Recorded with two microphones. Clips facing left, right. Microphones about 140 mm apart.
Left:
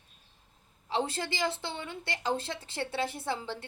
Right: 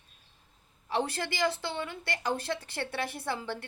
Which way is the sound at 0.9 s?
25° left (ahead or behind).